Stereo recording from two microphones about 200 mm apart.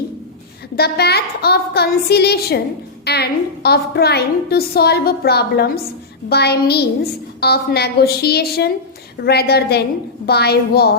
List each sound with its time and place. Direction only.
0.8 s a woman's voice: 55° left (ahead or behind)